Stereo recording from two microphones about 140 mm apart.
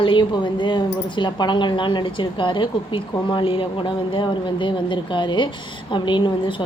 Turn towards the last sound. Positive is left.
turn(degrees=35)  # may be behind; listen again after turning